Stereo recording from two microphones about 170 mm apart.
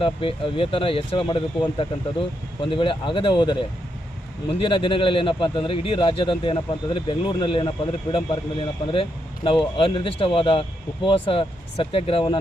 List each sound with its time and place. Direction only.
0.0 s speech: 30° left (ahead or behind)
4.6 s speech: 30° left (ahead or behind)